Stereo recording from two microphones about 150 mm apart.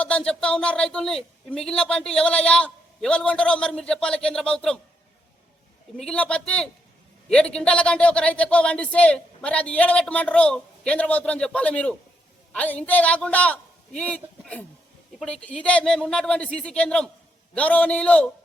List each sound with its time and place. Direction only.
0.0 s a woman's voice: 5° left (ahead or behind)
6.0 s a man's voice: 5° left (ahead or behind)